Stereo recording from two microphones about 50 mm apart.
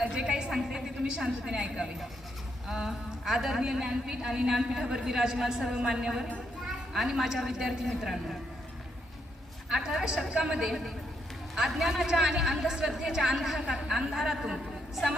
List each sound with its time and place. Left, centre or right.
0.0 s a sound: right
0.5 s a woman's voice: centre
9.6 s a woman's voice: centre
10.6 s a man's voice: centre